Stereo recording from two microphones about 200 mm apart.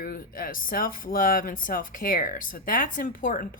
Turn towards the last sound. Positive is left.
turn(degrees=40)  # may be behind; listen again after turning